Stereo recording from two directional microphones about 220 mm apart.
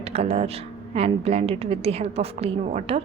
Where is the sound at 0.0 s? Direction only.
30° right (ahead or behind).